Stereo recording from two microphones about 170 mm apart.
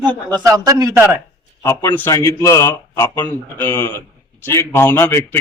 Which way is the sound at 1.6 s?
15° left (ahead or behind).